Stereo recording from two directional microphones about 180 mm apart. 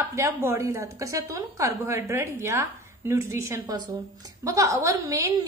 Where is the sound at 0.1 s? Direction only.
15° right (ahead or behind).